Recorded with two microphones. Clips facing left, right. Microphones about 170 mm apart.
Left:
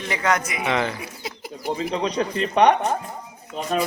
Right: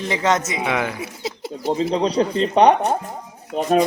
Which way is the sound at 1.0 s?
25° right (ahead or behind).